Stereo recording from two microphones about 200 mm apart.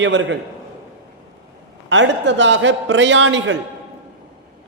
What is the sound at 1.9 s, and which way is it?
A man's voice, 65° right (ahead or behind).